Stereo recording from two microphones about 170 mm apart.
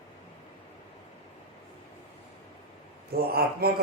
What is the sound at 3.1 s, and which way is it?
Speech, 65° right (ahead or behind).